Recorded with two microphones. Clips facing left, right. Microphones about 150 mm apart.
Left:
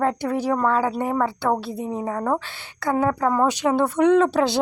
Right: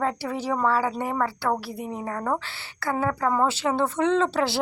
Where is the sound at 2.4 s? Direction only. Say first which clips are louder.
Left 4 dB; 15° left (ahead or behind).